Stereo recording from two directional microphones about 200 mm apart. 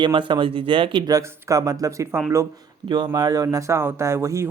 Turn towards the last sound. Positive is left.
turn(degrees=-15)  # may be behind; listen again after turning